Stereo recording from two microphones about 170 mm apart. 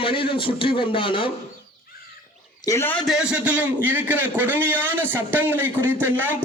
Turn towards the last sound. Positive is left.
turn(degrees=-10)  # may be behind; listen again after turning